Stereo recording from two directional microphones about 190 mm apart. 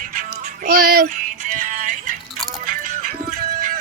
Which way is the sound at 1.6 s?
45° right (ahead or behind).